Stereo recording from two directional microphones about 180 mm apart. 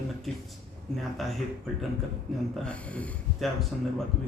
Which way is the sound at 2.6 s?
5° left (ahead or behind).